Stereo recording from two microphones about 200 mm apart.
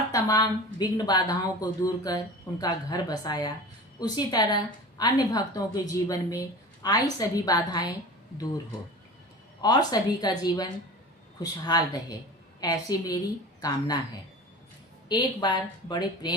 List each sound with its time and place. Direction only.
0.1 s a woman's voice: 20° left (ahead or behind)
9.6 s a woman's voice: 20° left (ahead or behind)
15.1 s a woman's voice: 20° left (ahead or behind)